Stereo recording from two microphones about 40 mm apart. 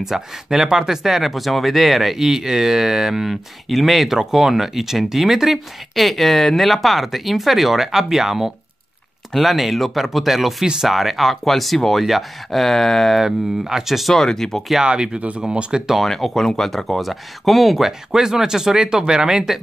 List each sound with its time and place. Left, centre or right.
0.0 s speech: centre
9.3 s speech: centre
13.2 s speech: centre
14.1 s speech: centre
14.8 s speech: right
16.0 s speech: centre